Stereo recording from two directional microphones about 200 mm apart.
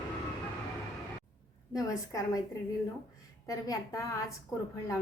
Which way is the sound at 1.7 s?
15° left (ahead or behind).